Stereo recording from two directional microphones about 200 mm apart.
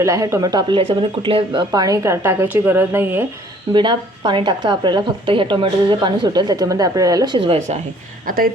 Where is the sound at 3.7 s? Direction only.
25° right (ahead or behind).